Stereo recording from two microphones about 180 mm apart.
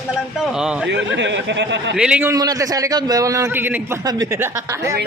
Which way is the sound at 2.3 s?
20° right (ahead or behind).